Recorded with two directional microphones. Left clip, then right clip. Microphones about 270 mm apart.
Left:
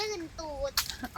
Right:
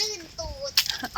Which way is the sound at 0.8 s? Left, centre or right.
Right.